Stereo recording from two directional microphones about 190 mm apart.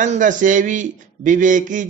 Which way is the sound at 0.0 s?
40° right (ahead or behind).